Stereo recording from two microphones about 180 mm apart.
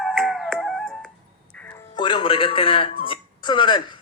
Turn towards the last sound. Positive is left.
turn(degrees=25)  # may be behind; listen again after turning